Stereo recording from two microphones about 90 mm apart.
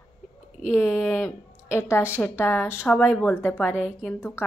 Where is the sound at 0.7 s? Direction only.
25° left (ahead or behind).